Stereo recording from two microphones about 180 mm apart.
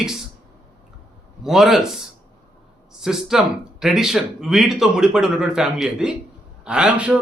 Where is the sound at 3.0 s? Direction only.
5° right (ahead or behind).